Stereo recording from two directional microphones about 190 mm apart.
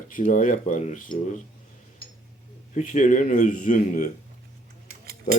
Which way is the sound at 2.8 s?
40° left (ahead or behind).